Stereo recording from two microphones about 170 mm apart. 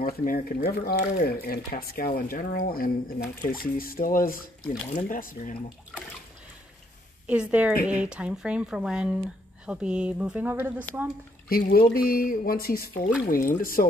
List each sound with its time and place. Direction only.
0.0 s speech: 55° left (ahead or behind)
7.2 s a woman's voice: 10° right (ahead or behind)
11.4 s speech: 60° left (ahead or behind)